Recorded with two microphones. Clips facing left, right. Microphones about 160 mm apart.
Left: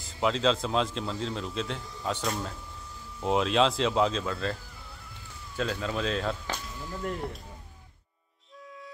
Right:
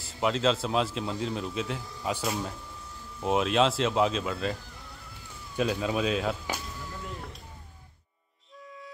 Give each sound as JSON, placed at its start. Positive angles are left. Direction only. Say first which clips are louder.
{"t": 0.0, "sound": "speech", "louder": "even", "side_deg": -5}
{"t": 5.6, "sound": "speech", "louder": "right 3 dB", "side_deg": -15}